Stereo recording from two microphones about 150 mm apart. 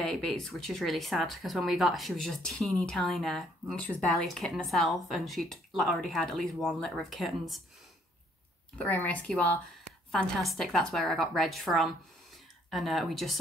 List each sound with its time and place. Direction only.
0.0 s speech: 5° left (ahead or behind)
8.7 s speech: 10° left (ahead or behind)